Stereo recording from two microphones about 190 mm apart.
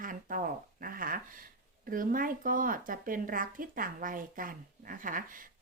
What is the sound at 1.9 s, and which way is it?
Speech, 45° right (ahead or behind).